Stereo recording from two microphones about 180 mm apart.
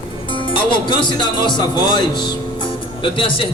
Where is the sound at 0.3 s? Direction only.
30° left (ahead or behind).